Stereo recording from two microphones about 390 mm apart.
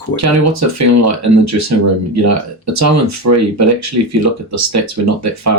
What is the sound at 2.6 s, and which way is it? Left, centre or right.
Speech, right.